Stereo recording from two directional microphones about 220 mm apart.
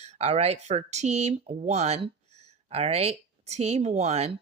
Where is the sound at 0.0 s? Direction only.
30° right (ahead or behind).